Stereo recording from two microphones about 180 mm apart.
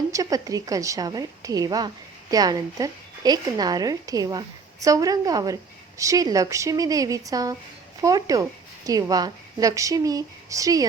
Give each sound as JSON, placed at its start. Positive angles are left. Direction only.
{"t": 0.1, "sound": "speech", "side_deg": -20}